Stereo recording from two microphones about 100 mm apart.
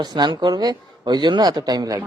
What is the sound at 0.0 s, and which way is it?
Speech, 45° right (ahead or behind).